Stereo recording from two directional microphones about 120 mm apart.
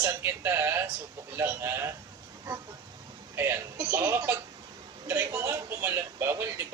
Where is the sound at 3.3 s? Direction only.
20° right (ahead or behind).